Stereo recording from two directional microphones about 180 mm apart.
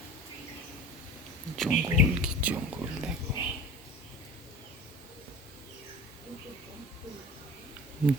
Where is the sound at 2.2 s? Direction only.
10° right (ahead or behind).